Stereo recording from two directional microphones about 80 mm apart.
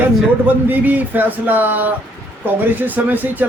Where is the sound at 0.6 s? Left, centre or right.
Right.